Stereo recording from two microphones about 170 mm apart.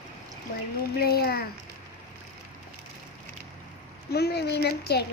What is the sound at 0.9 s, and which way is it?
Speech, 65° left (ahead or behind).